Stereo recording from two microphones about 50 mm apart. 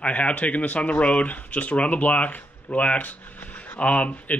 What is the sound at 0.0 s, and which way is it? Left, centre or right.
Speech, left.